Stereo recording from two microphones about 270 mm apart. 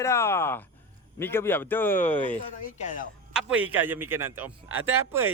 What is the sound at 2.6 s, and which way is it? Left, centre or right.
Speech, left.